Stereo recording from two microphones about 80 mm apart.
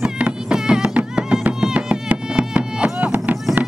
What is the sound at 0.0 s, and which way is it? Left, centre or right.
Music, centre.